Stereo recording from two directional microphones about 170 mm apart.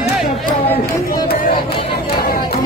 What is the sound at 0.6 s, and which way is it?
Chatter, 10° left (ahead or behind).